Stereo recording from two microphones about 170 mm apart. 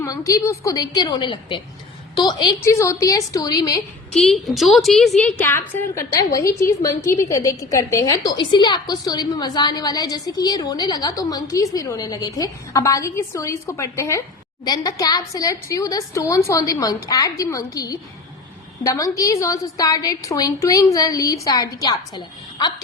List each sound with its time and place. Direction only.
0.0 s a woman's voice: 20° left (ahead or behind)
4.1 s a woman's voice: centre (ahead or behind)
5.2 s a woman's voice: 15° left (ahead or behind)